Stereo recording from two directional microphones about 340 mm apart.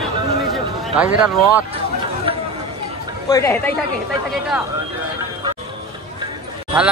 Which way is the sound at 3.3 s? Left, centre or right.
Centre.